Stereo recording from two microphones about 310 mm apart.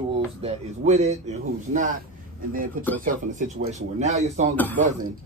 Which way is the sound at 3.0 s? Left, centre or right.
Right.